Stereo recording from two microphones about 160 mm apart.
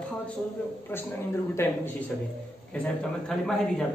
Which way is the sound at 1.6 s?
15° left (ahead or behind).